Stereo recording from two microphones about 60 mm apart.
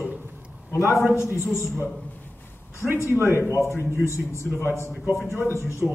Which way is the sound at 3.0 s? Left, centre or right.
Left.